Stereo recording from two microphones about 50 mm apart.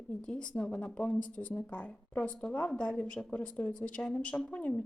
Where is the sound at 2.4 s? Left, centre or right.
Centre.